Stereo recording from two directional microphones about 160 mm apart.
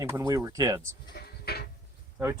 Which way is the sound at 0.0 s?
20° right (ahead or behind).